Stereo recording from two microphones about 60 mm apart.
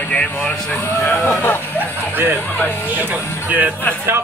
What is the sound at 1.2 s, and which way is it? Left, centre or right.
Speech, left.